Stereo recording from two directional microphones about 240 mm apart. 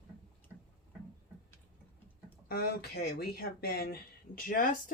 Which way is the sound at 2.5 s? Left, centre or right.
Left.